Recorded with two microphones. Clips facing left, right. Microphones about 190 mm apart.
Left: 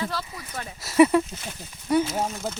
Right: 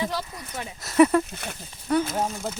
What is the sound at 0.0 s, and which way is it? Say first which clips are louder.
Speech: right 2 dB; 15° right (ahead or behind).